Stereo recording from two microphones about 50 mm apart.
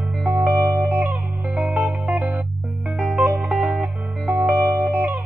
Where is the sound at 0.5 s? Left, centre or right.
Right.